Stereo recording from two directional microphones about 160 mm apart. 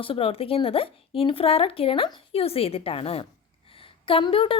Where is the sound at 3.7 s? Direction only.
35° left (ahead or behind).